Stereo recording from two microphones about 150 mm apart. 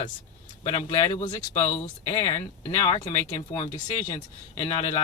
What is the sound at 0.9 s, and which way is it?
Speech, 30° left (ahead or behind).